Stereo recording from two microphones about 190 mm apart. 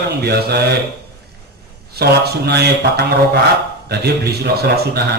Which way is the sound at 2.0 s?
55° right (ahead or behind).